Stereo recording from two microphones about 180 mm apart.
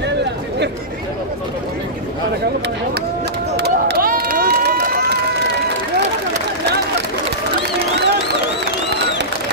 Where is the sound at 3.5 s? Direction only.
60° right (ahead or behind).